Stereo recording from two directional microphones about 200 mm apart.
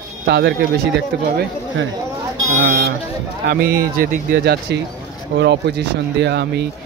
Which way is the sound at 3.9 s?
50° right (ahead or behind).